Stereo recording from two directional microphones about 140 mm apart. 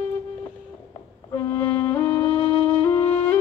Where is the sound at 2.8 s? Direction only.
40° left (ahead or behind).